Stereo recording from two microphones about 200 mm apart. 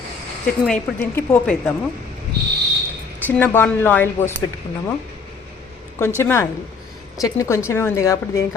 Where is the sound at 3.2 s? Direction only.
10° left (ahead or behind).